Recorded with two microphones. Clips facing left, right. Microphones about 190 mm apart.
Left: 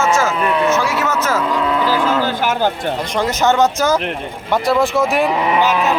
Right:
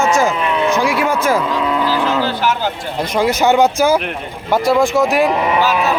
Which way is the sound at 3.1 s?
10° right (ahead or behind).